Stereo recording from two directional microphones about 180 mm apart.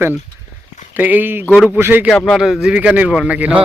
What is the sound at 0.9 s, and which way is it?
A man's voice, 10° right (ahead or behind).